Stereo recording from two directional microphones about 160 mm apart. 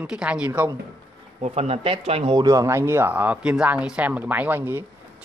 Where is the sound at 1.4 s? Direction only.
40° right (ahead or behind).